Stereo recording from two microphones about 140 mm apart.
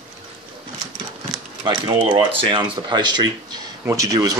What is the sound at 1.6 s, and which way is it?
Speech, 30° right (ahead or behind).